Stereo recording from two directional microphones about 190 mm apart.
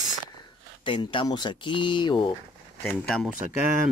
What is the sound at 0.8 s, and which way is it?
Speech, 25° left (ahead or behind).